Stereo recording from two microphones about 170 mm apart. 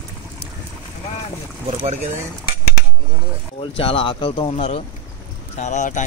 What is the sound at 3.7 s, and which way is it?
Speech, 30° left (ahead or behind).